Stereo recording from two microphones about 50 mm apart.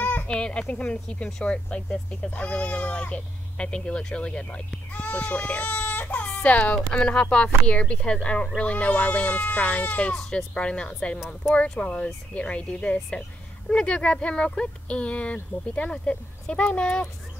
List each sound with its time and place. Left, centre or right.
0.3 s speech: centre